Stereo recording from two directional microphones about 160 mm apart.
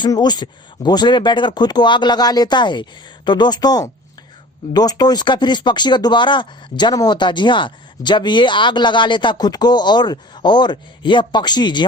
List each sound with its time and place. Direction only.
0.0 s speech: 25° left (ahead or behind)